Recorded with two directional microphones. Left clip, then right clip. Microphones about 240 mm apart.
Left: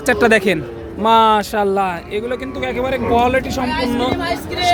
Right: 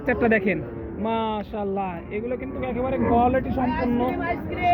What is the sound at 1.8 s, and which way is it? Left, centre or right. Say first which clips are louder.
Speech: left 9 dB; left.